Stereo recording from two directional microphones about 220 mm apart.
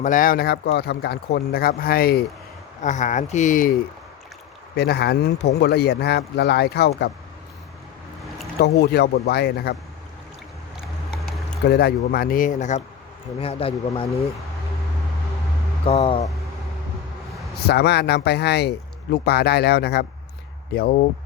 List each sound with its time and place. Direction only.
0.0 s speech: 40° left (ahead or behind)
4.8 s speech: 50° left (ahead or behind)
8.6 s speech: 45° left (ahead or behind)
11.3 s a sound: centre (ahead or behind)
11.6 s speech: 50° left (ahead or behind); by 14.3 s 25° left (ahead or behind)
15.9 s speech: 25° left (ahead or behind)
17.7 s speech: 45° left (ahead or behind)